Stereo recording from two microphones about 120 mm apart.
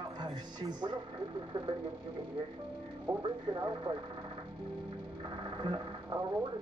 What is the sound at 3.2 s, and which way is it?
Speech, 40° right (ahead or behind).